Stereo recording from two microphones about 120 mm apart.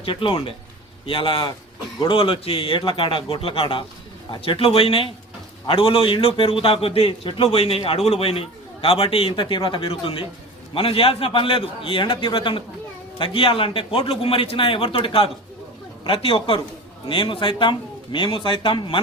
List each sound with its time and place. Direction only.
0.0 s a man's voice: 50° left (ahead or behind)